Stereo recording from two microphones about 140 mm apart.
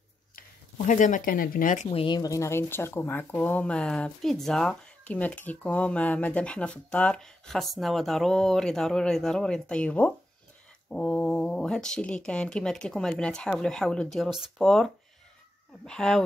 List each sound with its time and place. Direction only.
0.4 s speech: 65° left (ahead or behind)
1.9 s speech: 40° left (ahead or behind); by 16.2 s 5° left (ahead or behind)